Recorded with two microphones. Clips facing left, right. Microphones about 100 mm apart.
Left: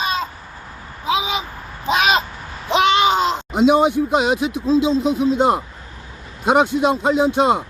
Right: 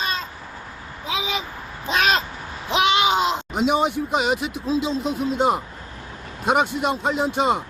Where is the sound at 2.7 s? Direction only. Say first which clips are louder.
Left 4 dB; 5° right (ahead or behind).